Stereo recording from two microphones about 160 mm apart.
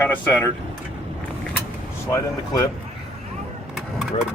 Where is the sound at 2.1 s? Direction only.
20° left (ahead or behind).